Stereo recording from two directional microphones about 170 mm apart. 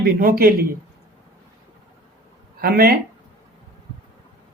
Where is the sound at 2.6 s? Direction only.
65° right (ahead or behind).